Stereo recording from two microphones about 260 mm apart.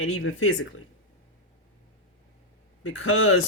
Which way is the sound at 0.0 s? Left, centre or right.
Left.